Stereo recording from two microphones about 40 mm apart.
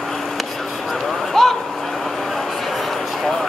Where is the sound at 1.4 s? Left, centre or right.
Centre.